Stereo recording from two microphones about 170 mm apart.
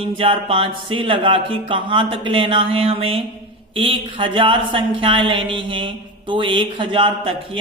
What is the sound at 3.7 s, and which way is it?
Speech, 30° right (ahead or behind).